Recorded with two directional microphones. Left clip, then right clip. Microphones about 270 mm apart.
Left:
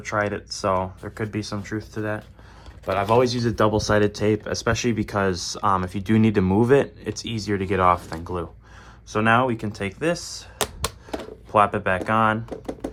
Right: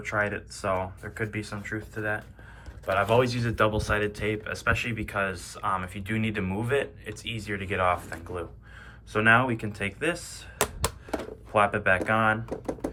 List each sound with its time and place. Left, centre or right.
0.2 s speech: centre
11.5 s speech: centre
12.5 s speech: centre